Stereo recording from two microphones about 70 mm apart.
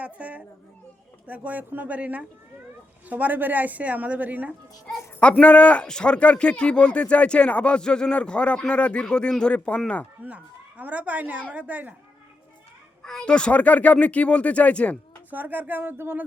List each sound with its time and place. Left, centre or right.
0.0 s a child's voice: right
5.4 s speech: centre
10.2 s a woman's voice: right
13.0 s speech: centre
15.3 s a woman's voice: right